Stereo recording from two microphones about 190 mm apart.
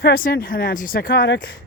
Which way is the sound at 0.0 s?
50° left (ahead or behind).